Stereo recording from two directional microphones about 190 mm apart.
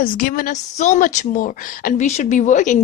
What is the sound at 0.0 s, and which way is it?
A woman's voice, 50° left (ahead or behind).